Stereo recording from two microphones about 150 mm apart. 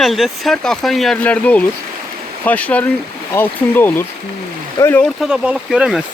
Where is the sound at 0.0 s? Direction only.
Centre (ahead or behind).